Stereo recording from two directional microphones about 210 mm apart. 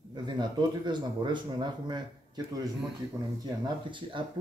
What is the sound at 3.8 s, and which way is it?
Speech, 25° right (ahead or behind).